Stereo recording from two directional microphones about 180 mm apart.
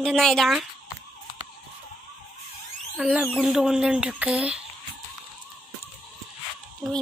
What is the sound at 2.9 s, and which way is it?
Speech, 5° right (ahead or behind).